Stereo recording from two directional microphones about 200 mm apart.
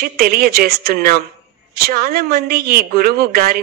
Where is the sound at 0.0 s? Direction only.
50° right (ahead or behind).